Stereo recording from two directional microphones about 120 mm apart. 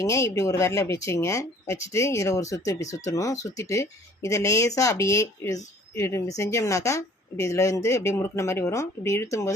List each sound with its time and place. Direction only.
0.0 s speech: 25° left (ahead or behind)